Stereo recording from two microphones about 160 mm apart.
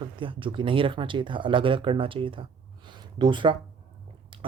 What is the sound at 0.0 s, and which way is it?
Speech, 30° right (ahead or behind).